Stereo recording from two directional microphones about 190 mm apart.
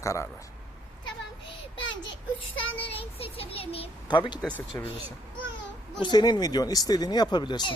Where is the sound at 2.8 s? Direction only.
30° left (ahead or behind).